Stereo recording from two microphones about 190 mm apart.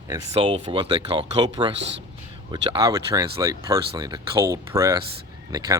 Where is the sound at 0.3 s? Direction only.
30° right (ahead or behind).